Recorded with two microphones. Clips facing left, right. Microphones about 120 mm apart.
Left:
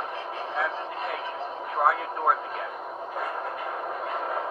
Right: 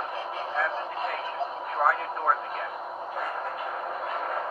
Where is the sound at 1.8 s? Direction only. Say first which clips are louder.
Left 1 dB; 15° left (ahead or behind).